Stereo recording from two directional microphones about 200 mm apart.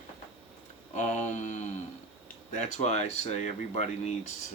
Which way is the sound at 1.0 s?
35° left (ahead or behind).